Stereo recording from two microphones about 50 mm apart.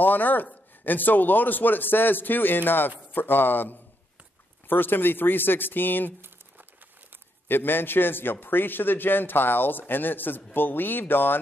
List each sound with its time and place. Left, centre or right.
0.0 s a man's voice: left
6.2 s crumpling: right
7.4 s a man's voice: left